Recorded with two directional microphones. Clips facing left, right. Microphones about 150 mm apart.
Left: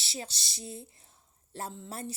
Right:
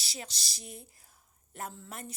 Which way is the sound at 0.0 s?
30° left (ahead or behind).